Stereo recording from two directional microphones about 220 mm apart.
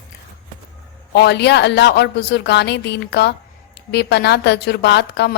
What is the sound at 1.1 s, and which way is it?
A woman's voice, 50° left (ahead or behind).